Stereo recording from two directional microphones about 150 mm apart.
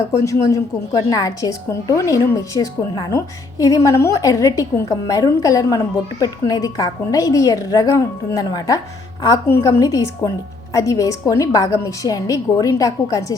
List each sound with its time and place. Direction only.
0.3 s a woman's voice: 20° left (ahead or behind)